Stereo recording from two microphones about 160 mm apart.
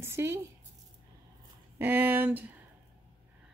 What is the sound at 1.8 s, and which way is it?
Speech, 15° right (ahead or behind).